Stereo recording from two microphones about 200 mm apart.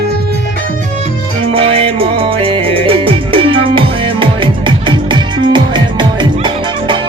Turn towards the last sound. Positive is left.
turn(degrees=-25)  # may be behind; listen again after turning